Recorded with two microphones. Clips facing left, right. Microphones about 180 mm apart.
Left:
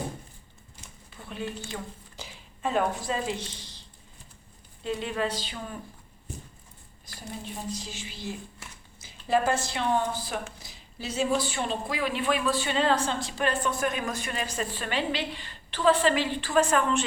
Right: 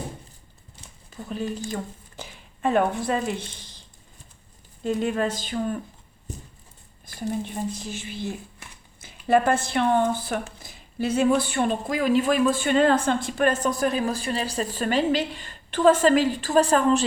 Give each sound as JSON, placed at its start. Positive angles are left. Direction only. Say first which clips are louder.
{"t": 1.1, "sound": "speech", "louder": "right 6 dB", "side_deg": -40}
{"t": 4.8, "sound": "a woman's voice", "louder": "right 5 dB", "side_deg": -45}
{"t": 7.0, "sound": "a woman's voice", "louder": "right 11 dB", "side_deg": -55}